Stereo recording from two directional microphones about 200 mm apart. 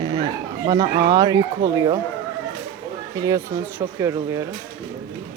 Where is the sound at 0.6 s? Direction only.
15° right (ahead or behind).